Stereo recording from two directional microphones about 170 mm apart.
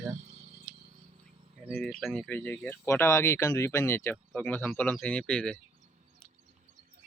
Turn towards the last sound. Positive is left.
turn(degrees=5)  # may be behind; listen again after turning